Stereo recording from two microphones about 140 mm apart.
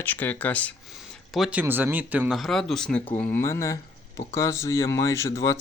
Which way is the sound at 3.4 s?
20° left (ahead or behind).